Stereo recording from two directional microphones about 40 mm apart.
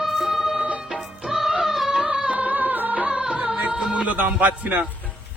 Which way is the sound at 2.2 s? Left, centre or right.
Right.